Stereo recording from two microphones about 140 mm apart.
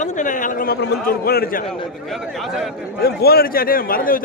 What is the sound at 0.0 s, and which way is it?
A man's voice, 65° left (ahead or behind).